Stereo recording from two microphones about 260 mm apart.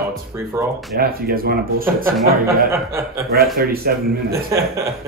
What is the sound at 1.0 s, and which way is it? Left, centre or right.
Speech, right.